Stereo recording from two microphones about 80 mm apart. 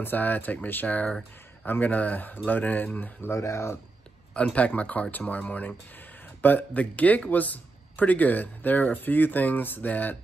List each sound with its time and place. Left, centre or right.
0.0 s a man's voice: left
3.3 s speech: left
4.3 s a man's voice: centre